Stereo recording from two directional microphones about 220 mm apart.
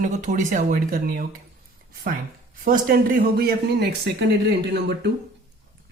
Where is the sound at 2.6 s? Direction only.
40° right (ahead or behind).